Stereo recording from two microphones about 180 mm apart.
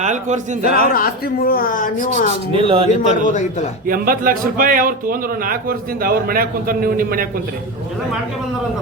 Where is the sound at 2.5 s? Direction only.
30° right (ahead or behind).